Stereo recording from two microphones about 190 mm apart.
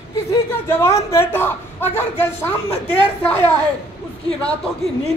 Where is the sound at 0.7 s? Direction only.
15° left (ahead or behind).